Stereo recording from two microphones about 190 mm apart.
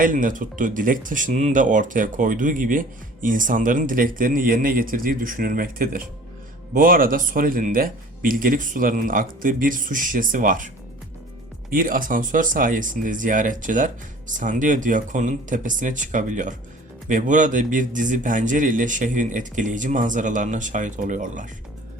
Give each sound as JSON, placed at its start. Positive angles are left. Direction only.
{"t": 0.0, "sound": "speech", "side_deg": -45}
{"t": 11.7, "sound": "speech", "side_deg": -45}